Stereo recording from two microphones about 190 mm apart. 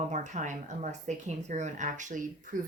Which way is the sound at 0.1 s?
40° right (ahead or behind).